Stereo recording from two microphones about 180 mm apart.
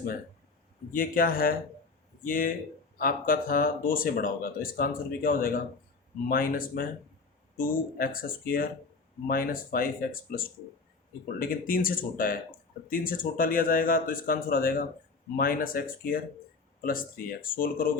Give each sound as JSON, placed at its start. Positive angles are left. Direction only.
{"t": 0.9, "sound": "speech", "side_deg": 50}